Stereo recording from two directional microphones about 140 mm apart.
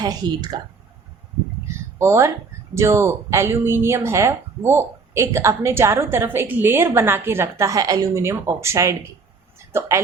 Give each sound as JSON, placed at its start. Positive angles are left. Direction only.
{"t": 0.0, "sound": "speech", "side_deg": -30}
{"t": 1.6, "sound": "a sound", "side_deg": -20}
{"t": 2.7, "sound": "speech", "side_deg": -20}